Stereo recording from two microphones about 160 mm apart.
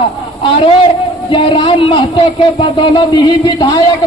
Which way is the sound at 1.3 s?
35° left (ahead or behind).